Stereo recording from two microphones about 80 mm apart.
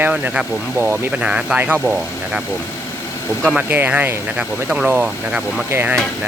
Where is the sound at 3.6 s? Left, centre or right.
Right.